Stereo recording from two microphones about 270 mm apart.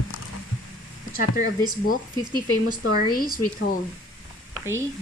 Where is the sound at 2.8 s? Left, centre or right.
Left.